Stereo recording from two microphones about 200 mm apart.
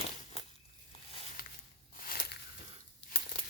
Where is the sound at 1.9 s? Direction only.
45° left (ahead or behind).